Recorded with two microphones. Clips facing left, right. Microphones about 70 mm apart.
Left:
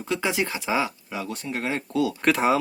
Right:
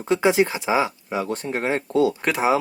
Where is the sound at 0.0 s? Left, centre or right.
Right.